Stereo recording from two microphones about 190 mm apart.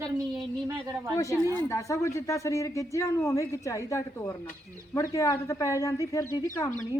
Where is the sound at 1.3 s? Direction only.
15° right (ahead or behind).